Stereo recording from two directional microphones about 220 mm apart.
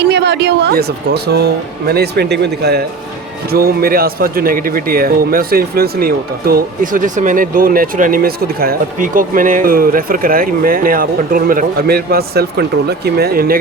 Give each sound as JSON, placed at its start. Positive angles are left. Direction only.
{"t": 0.0, "sound": "a man's voice", "side_deg": -50}